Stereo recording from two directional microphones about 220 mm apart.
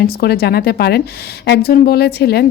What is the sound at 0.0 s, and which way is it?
A woman's voice, 45° left (ahead or behind).